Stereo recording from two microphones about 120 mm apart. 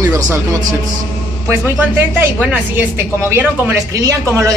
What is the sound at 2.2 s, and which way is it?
A woman's voice, 15° right (ahead or behind).